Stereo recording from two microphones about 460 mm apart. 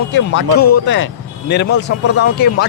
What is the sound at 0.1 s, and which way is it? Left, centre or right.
Speech, left.